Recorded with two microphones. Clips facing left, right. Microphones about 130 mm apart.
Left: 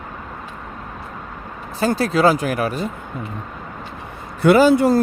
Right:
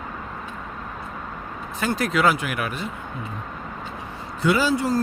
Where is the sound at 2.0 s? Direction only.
35° left (ahead or behind).